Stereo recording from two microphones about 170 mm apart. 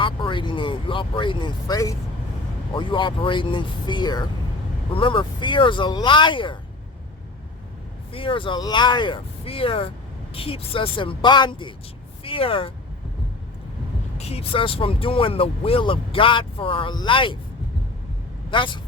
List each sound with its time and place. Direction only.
0.0 s speech: 30° left (ahead or behind)
8.1 s speech: 30° left (ahead or behind)
14.2 s speech: 35° left (ahead or behind)
18.5 s speech: 30° left (ahead or behind)